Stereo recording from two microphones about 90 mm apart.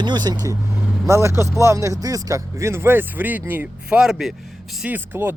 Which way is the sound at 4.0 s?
5° right (ahead or behind).